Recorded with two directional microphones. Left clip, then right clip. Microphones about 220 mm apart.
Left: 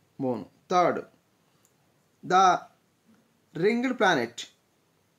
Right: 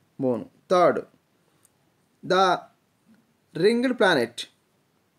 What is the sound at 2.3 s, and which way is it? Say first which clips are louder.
Speech: even; 20° right (ahead or behind).